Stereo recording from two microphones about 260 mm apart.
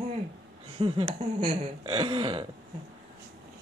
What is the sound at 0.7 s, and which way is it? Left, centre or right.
Speech, right.